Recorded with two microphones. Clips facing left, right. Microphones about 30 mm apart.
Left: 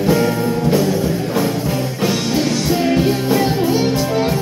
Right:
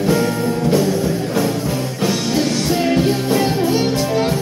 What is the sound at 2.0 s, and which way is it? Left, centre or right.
Music, centre.